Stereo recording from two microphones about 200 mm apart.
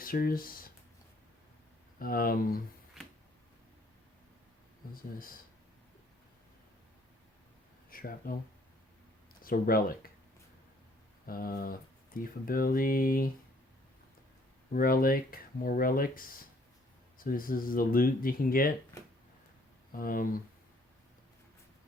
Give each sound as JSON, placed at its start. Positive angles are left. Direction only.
{"t": 0.0, "sound": "speech", "side_deg": 45}
{"t": 2.0, "sound": "speech", "side_deg": 45}
{"t": 5.1, "sound": "speech", "side_deg": 45}
{"t": 7.9, "sound": "speech", "side_deg": 45}
{"t": 9.4, "sound": "speech", "side_deg": 45}
{"t": 11.3, "sound": "speech", "side_deg": 45}
{"t": 14.7, "sound": "speech", "side_deg": 45}
{"t": 19.9, "sound": "speech", "side_deg": 45}